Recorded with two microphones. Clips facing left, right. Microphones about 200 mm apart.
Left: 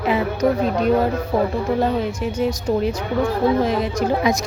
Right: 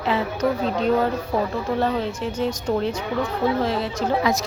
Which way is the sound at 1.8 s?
10° left (ahead or behind).